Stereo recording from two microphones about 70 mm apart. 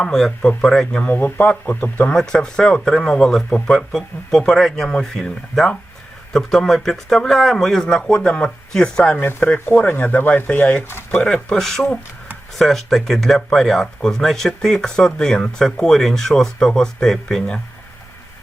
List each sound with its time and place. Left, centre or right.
0.0 s speech: centre
1.0 s speech: left
2.1 s speech: centre
9.2 s speech: left; by 17.6 s centre